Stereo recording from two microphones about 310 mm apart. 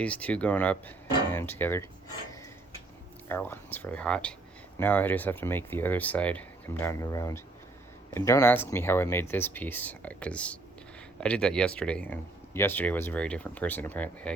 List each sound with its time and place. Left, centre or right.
0.0 s speech: centre
3.2 s speech: centre